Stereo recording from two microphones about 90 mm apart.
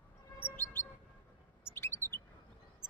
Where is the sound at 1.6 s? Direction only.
30° left (ahead or behind).